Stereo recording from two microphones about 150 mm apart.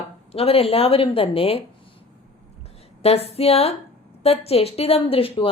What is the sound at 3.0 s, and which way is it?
A woman's voice, 45° left (ahead or behind).